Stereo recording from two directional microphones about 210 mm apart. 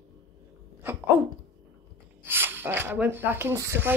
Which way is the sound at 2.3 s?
10° right (ahead or behind).